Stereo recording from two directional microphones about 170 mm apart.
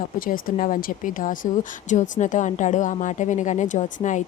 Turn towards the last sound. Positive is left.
turn(degrees=45)  # may be behind; listen again after turning